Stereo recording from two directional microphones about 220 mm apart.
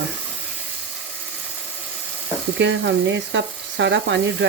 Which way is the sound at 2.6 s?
55° right (ahead or behind).